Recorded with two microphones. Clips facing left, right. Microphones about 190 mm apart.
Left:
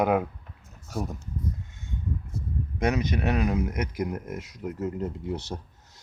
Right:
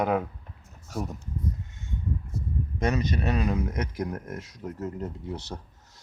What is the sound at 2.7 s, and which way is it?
Speech, 15° left (ahead or behind).